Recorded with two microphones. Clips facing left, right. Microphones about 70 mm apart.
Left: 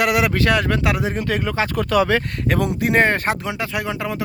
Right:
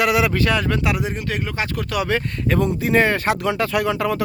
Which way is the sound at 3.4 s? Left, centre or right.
Centre.